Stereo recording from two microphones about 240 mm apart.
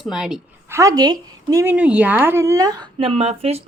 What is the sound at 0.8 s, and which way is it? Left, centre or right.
Speech, centre.